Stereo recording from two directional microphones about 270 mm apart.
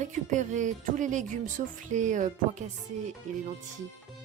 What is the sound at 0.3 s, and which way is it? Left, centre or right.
Speech, right.